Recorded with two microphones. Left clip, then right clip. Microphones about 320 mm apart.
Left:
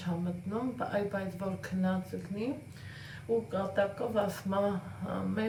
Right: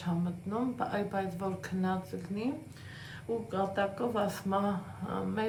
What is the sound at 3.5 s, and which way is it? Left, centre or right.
Speech, centre.